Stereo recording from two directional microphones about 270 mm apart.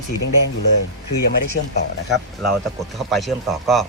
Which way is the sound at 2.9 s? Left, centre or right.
Centre.